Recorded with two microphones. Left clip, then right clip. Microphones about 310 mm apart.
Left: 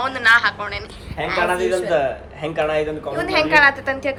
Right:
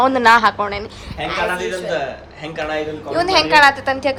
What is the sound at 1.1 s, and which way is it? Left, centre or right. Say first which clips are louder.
Speech: left 1 dB; centre.